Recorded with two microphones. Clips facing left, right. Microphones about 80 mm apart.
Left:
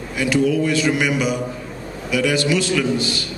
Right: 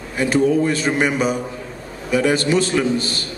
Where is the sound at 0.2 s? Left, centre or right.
Right.